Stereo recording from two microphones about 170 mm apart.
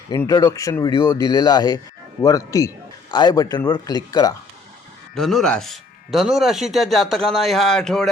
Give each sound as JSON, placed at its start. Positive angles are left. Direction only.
{"t": 0.1, "sound": "a man's voice", "side_deg": 20}
{"t": 5.1, "sound": "speech", "side_deg": 0}